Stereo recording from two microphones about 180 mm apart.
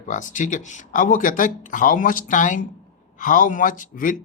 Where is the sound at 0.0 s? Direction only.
45° left (ahead or behind).